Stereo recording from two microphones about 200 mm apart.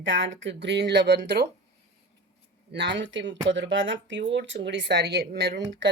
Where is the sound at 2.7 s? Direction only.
60° right (ahead or behind).